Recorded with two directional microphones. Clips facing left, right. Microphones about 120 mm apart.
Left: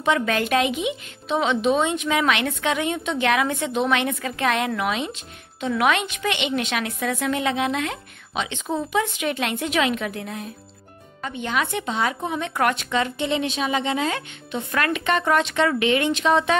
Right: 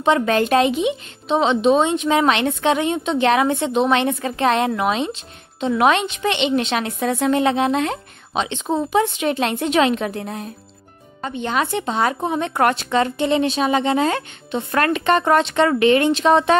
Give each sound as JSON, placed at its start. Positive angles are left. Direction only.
{"t": 0.0, "sound": "a woman's voice", "side_deg": -30}